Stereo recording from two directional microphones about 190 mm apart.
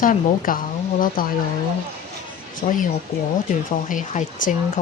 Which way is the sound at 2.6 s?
45° left (ahead or behind).